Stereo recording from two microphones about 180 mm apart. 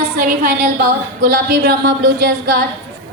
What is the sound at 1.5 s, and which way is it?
A woman's voice, 75° right (ahead or behind).